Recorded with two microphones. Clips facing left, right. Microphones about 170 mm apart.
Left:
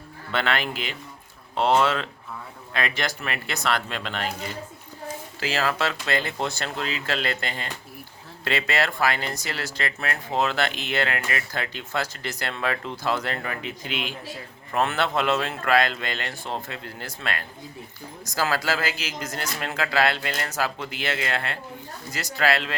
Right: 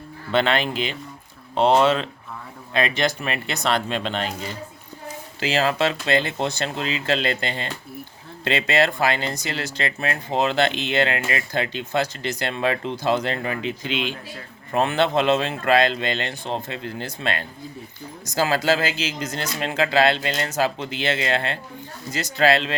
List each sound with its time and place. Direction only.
0.3 s speech: 20° right (ahead or behind)
5.4 s speech: 20° right (ahead or behind)